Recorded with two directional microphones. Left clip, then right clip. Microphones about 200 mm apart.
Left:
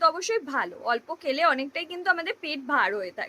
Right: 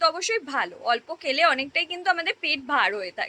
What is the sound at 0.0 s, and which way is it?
A woman's voice, 20° left (ahead or behind).